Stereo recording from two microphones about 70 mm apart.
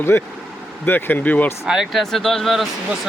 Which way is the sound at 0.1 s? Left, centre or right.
Left.